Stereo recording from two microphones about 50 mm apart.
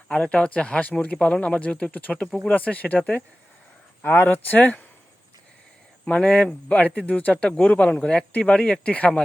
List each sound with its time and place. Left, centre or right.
0.1 s a man's voice: left
4.0 s speech: left
6.1 s a man's voice: left